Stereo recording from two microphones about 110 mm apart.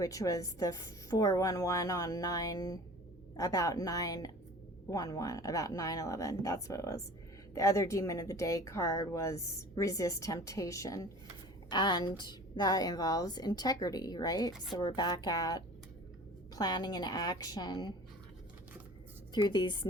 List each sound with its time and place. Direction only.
0.0 s a woman's voice: 30° left (ahead or behind)
11.7 s a woman's voice: 40° left (ahead or behind)
19.3 s a woman's voice: 40° left (ahead or behind)